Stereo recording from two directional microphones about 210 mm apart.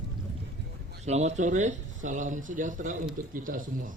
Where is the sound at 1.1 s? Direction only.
30° right (ahead or behind).